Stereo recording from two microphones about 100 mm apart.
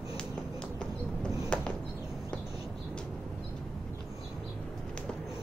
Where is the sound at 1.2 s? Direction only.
10° left (ahead or behind).